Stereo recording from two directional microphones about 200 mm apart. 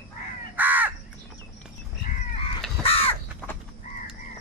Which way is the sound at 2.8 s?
30° left (ahead or behind).